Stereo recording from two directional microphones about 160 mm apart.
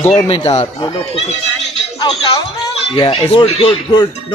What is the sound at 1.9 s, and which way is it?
Speech, 25° left (ahead or behind).